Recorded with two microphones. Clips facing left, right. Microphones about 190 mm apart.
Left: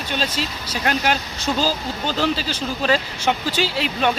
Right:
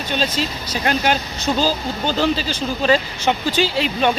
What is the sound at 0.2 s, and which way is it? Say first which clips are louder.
Speech: right 3 dB; 5° left (ahead or behind).